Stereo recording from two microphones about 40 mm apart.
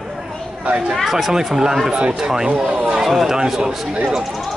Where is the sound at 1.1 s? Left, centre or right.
Centre.